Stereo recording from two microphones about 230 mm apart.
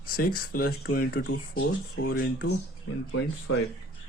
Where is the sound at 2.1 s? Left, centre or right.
Left.